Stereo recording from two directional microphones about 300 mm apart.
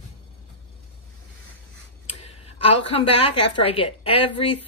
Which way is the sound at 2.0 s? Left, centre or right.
Left.